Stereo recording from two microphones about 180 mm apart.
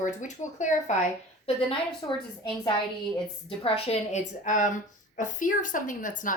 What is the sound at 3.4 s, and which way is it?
A woman's voice, 35° left (ahead or behind).